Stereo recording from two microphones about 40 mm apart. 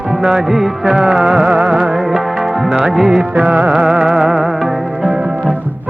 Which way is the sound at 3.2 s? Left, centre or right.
Right.